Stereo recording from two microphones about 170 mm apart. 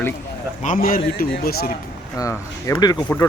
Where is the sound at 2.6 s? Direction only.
20° left (ahead or behind).